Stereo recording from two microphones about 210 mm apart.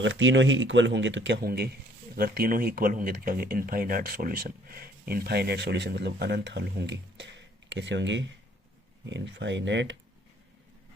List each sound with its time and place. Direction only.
0.0 s speech: 60° right (ahead or behind)